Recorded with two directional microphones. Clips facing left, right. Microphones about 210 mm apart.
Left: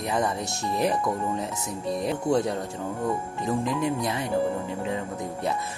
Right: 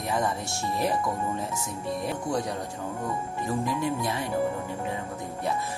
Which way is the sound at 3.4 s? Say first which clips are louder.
Left 2 dB; 20° left (ahead or behind).